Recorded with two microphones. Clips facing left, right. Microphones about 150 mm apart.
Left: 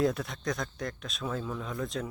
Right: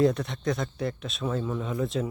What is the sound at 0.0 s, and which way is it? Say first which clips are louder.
Speech: right 5 dB; centre (ahead or behind).